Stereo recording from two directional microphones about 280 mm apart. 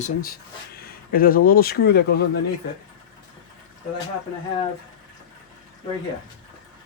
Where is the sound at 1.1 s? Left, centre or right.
Left.